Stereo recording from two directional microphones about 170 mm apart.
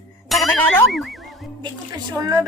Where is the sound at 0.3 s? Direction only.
Centre (ahead or behind).